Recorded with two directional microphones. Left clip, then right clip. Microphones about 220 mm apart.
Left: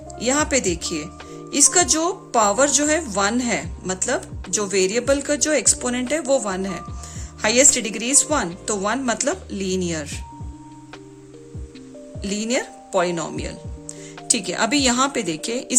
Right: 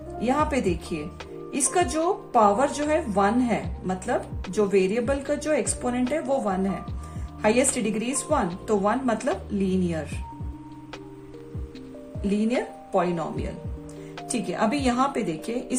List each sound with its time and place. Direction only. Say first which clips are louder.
0.2 s a woman's voice: left 3 dB; 45° left (ahead or behind)
12.3 s a woman's voice: left 2 dB; 45° left (ahead or behind)